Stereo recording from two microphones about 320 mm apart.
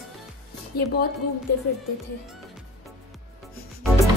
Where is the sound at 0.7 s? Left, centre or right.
Left.